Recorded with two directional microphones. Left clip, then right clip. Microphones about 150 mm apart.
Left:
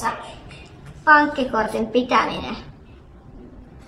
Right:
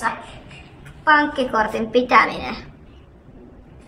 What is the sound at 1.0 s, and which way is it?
A woman's voice, 20° left (ahead or behind).